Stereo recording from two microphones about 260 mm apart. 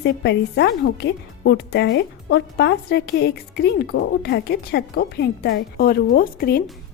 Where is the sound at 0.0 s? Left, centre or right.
Left.